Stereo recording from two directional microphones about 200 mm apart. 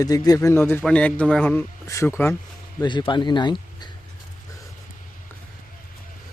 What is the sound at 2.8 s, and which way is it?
Speech, 25° left (ahead or behind).